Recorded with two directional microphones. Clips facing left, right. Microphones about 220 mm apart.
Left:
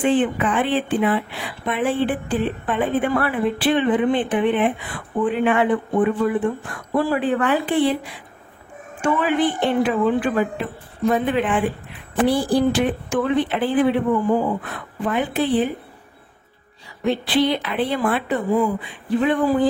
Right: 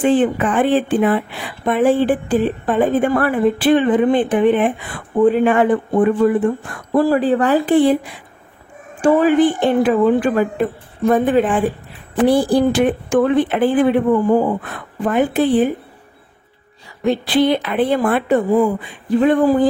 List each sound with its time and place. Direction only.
0.0 s a woman's voice: 45° right (ahead or behind)
9.0 s a woman's voice: 40° right (ahead or behind)
17.0 s a woman's voice: 50° right (ahead or behind)